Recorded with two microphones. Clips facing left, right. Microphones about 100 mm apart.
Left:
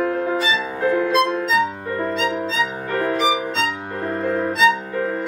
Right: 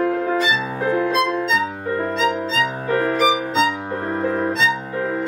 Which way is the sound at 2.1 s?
Centre (ahead or behind).